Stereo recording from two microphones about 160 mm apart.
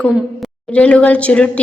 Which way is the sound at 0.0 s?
5° left (ahead or behind).